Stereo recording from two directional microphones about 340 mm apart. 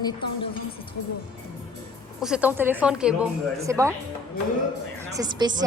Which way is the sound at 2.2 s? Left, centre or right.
Centre.